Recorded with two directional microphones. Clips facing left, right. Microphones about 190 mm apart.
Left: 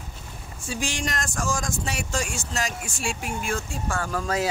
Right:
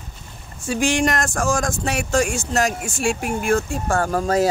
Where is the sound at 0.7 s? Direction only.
60° right (ahead or behind).